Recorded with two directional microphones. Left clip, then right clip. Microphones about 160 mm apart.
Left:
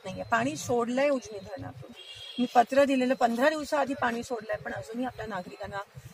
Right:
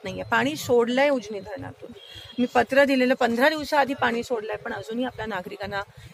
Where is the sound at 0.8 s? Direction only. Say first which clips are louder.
Right 3 dB; 30° right (ahead or behind).